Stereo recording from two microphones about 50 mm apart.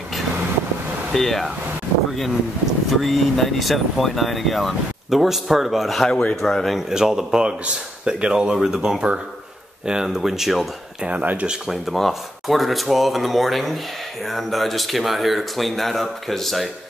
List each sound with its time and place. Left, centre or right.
1.1 s speech: centre
2.6 s speech: centre
6.9 s speech: centre
11.1 s speech: right
11.4 s speech: centre